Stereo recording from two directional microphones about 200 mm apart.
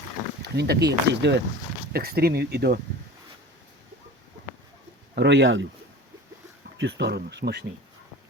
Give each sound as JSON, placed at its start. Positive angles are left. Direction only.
{"t": 0.4, "sound": "speech", "side_deg": -55}
{"t": 5.1, "sound": "speech", "side_deg": -60}
{"t": 6.7, "sound": "speech", "side_deg": -60}